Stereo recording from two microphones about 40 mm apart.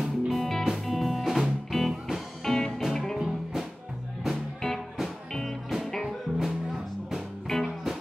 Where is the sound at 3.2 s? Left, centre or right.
Centre.